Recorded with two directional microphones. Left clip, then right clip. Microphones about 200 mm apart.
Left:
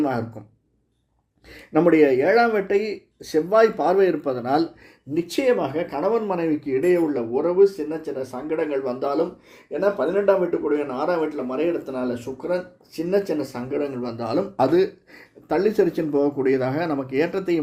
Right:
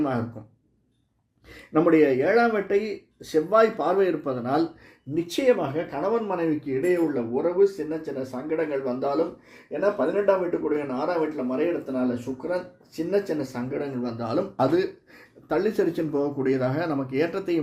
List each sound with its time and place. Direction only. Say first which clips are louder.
1.5 s speech: left 3 dB; 40° left (ahead or behind)